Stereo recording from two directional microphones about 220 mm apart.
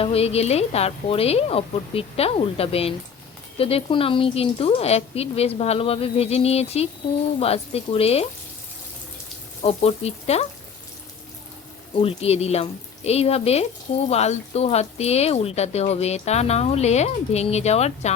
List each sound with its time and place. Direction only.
0.0 s speech: 25° left (ahead or behind)
9.6 s speech: 30° left (ahead or behind)
11.9 s speech: 25° left (ahead or behind)